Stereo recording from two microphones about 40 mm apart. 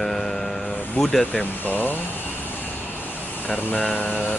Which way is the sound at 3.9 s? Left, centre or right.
Left.